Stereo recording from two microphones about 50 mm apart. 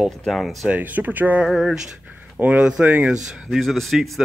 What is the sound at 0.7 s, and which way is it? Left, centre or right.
Speech, right.